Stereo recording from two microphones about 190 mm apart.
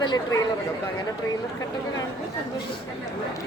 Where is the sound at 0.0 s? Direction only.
20° left (ahead or behind).